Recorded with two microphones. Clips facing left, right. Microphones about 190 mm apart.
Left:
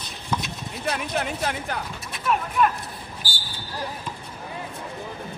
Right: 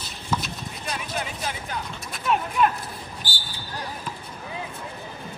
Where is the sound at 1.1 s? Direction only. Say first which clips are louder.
Left 4 dB; 65° left (ahead or behind).